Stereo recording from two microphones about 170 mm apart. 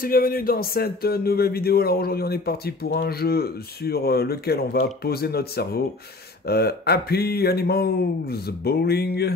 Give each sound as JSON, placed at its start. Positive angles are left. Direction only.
{"t": 0.0, "sound": "speech", "side_deg": 60}